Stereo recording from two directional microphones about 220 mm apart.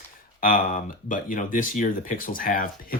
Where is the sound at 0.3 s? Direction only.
35° left (ahead or behind).